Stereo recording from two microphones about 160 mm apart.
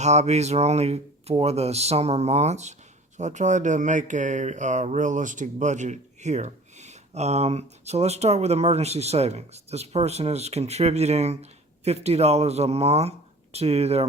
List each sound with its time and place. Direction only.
0.0 s speech: 45° right (ahead or behind)